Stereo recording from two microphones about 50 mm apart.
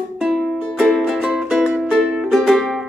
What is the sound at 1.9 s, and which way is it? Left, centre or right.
Music, centre.